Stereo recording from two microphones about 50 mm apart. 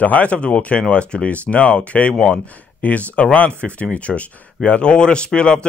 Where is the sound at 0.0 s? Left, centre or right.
Left.